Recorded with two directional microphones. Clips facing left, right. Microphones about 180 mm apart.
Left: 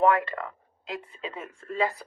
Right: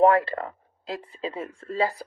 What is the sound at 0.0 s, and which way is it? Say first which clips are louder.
Speech: right 4 dB; 35° right (ahead or behind).